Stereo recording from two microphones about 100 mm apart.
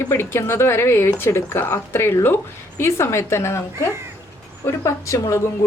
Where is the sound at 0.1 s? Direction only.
25° left (ahead or behind).